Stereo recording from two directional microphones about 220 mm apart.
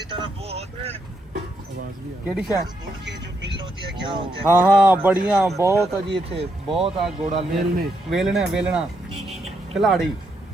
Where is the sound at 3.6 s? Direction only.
20° right (ahead or behind).